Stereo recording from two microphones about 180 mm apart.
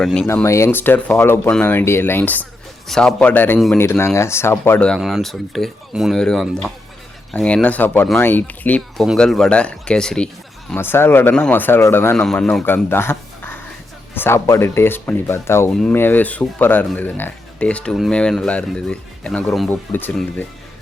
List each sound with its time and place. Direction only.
0.0 s speech: 5° left (ahead or behind)
0.3 s speech: 15° left (ahead or behind)